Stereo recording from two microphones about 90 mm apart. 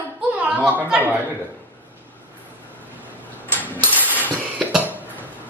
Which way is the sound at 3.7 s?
20° left (ahead or behind).